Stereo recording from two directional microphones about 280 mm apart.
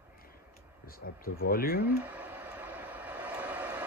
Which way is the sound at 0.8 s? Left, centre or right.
Left.